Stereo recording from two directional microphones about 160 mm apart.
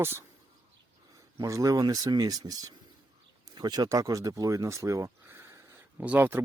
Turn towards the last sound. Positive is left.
turn(degrees=-10)  # may be behind; listen again after turning